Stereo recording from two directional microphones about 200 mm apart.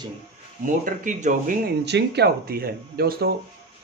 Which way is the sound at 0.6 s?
40° right (ahead or behind).